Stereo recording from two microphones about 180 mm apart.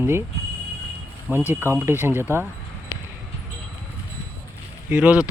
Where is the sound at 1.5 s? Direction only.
10° right (ahead or behind).